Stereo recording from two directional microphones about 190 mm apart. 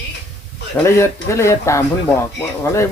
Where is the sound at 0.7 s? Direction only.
15° left (ahead or behind).